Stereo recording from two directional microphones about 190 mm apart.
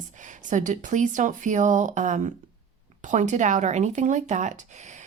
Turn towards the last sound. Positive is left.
turn(degrees=-40)  # may be behind; listen again after turning